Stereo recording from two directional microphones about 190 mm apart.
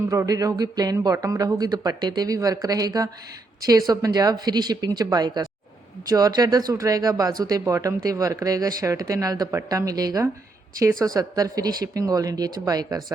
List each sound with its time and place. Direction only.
0.0 s speech: 15° right (ahead or behind)